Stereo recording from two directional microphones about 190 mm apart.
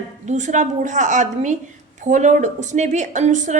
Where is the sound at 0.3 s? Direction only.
40° right (ahead or behind).